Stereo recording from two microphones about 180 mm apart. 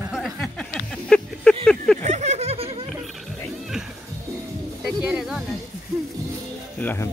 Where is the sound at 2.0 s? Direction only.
40° right (ahead or behind).